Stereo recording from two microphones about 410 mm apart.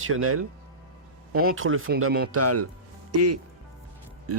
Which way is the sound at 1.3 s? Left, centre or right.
Right.